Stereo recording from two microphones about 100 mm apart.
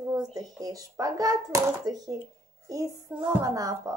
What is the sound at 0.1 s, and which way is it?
A child's voice, 40° right (ahead or behind).